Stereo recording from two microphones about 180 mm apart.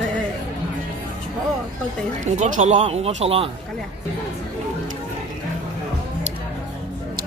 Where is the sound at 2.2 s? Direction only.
40° right (ahead or behind).